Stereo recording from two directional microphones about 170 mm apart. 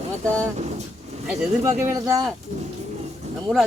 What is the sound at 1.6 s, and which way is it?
Speech, 15° right (ahead or behind).